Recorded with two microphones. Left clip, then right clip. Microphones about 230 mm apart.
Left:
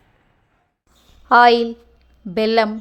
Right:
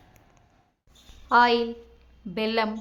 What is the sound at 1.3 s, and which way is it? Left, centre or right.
A woman's voice, left.